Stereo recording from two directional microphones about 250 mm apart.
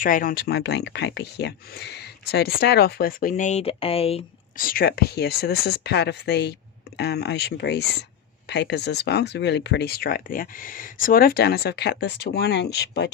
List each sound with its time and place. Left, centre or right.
0.0 s speech: left
4.6 s speech: left